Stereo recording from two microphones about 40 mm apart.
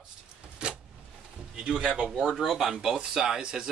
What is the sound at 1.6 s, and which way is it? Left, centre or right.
Speech, right.